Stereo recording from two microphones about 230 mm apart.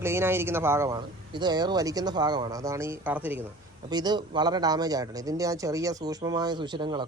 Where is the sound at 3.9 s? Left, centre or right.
Centre.